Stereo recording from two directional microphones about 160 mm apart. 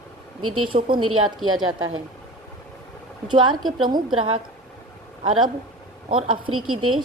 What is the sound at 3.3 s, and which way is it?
A woman's voice, 30° right (ahead or behind).